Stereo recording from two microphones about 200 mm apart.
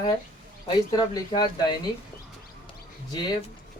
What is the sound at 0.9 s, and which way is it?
Speech, 20° left (ahead or behind).